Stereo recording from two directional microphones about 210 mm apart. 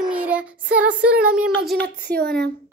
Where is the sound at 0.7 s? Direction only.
5° right (ahead or behind).